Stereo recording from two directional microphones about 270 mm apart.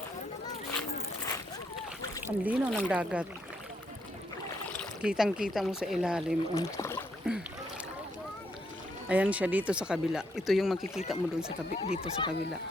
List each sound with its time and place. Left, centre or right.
2.4 s speech: centre
4.7 s speech: centre
6.5 s speech: centre
7.3 s speech: centre
9.0 s speech: centre
11.8 s speech: centre